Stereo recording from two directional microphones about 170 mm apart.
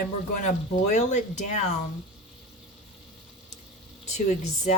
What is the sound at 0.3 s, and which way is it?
Speech, 45° left (ahead or behind).